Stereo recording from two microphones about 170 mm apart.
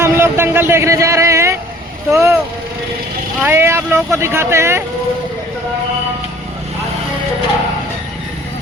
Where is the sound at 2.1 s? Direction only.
15° right (ahead or behind).